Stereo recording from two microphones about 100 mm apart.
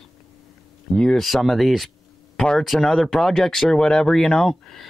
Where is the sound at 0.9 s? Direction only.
5° left (ahead or behind).